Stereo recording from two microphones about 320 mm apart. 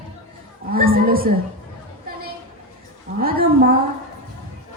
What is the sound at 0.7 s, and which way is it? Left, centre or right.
Speech, right.